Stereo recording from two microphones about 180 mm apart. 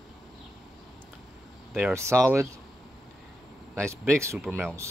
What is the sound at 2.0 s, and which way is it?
Speech, 15° right (ahead or behind).